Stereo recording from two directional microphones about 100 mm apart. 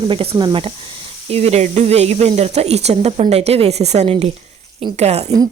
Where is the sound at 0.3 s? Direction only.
45° right (ahead or behind).